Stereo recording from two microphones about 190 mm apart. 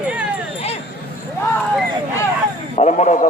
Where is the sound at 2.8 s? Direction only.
35° left (ahead or behind).